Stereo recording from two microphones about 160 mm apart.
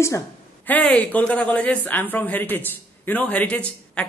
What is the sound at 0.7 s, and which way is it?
A woman's voice, 10° left (ahead or behind).